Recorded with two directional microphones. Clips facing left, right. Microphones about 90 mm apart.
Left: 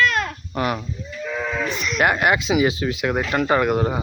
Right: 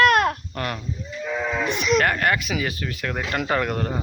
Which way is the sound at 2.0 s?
15° left (ahead or behind).